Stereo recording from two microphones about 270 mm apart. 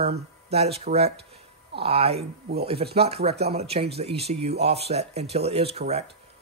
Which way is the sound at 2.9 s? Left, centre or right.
Right.